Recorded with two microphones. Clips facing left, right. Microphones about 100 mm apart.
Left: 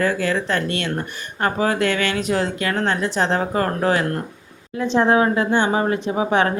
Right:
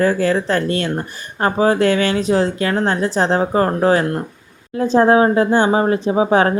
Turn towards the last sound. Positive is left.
turn(degrees=-35)  # may be behind; listen again after turning